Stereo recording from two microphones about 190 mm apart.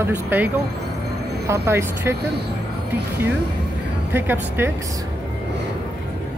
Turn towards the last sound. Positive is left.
turn(degrees=-10)  # may be behind; listen again after turning